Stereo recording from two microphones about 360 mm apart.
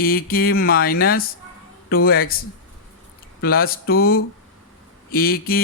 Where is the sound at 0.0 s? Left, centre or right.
Left.